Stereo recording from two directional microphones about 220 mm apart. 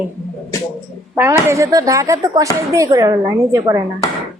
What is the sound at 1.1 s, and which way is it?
Speech, 10° right (ahead or behind).